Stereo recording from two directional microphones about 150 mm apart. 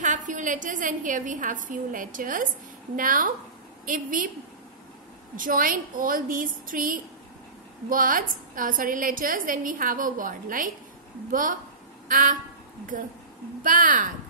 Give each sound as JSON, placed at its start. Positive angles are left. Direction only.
{"t": 0.0, "sound": "a woman's voice", "side_deg": -55}
{"t": 5.3, "sound": "a woman's voice", "side_deg": -65}
{"t": 12.1, "sound": "a woman's voice", "side_deg": -65}
{"t": 13.6, "sound": "a woman's voice", "side_deg": -65}